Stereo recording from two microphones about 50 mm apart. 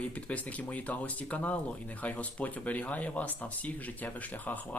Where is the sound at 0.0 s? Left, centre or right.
Left.